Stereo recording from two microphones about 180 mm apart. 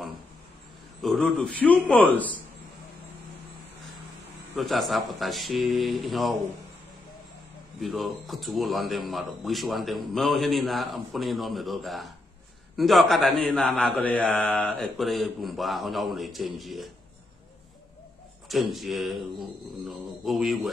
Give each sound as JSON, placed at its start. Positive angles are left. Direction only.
{"t": 1.0, "sound": "a man's voice", "side_deg": 0}
{"t": 4.6, "sound": "speech", "side_deg": 0}
{"t": 7.8, "sound": "speech", "side_deg": 0}
{"t": 18.5, "sound": "speech", "side_deg": 0}